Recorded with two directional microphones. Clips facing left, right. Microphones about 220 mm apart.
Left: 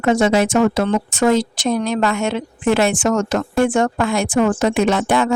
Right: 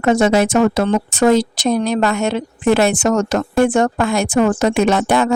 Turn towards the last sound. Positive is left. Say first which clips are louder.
# right 2 dB
turn(degrees=-40)  # may be behind; listen again after turning